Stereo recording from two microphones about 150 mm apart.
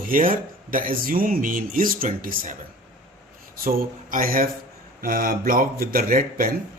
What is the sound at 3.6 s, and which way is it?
Speech, 75° right (ahead or behind).